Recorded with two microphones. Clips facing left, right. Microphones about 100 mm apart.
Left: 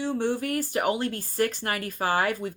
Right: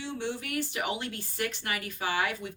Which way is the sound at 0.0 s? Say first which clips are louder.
Left 8 dB; 45° left (ahead or behind).